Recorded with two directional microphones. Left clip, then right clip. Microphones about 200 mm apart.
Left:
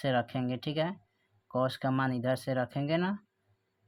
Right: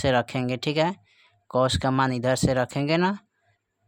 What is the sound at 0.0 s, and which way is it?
Speech, 30° right (ahead or behind).